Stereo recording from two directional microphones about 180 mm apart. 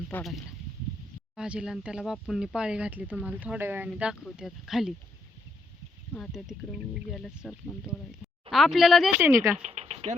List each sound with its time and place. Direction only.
0.1 s speech: centre (ahead or behind)
6.1 s speech: centre (ahead or behind)
9.2 s speech: 15° right (ahead or behind)
9.6 s a sound: 40° right (ahead or behind)